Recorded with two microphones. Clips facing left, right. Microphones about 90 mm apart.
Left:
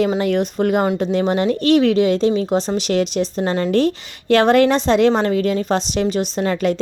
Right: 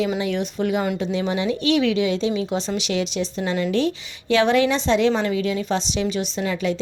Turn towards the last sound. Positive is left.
turn(degrees=50)  # may be behind; listen again after turning